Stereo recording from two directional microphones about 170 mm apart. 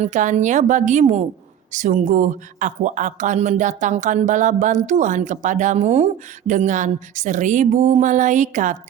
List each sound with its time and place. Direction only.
0.0 s speech: 45° right (ahead or behind)